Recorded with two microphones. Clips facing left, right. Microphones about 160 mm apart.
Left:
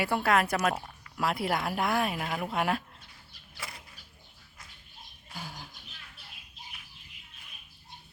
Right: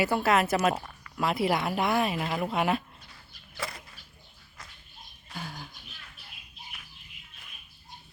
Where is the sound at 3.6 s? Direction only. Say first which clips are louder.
Right 7 dB; 85° right.